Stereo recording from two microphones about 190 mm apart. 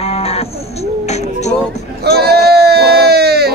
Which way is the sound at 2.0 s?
55° right (ahead or behind).